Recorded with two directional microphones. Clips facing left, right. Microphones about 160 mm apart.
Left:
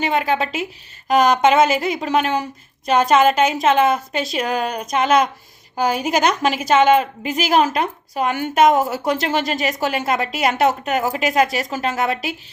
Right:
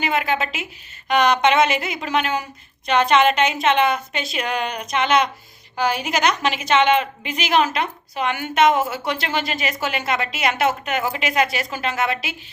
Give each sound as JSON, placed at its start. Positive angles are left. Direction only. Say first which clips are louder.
{"t": 0.0, "sound": "a woman's voice", "louder": "left 3 dB", "side_deg": 35}
{"t": 4.6, "sound": "a sound", "louder": "left 3 dB", "side_deg": 45}
{"t": 5.7, "sound": "a woman's voice", "louder": "left 3 dB", "side_deg": 45}